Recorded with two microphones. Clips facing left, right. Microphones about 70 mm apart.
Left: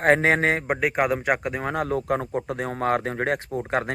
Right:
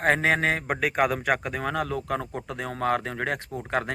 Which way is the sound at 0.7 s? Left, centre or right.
Centre.